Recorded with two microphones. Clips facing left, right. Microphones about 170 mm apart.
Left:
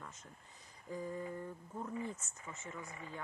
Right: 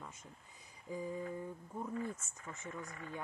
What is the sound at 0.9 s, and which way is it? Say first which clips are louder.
Speech: right 1 dB; 10° right (ahead or behind).